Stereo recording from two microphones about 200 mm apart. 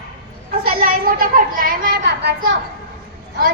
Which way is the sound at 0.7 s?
45° right (ahead or behind).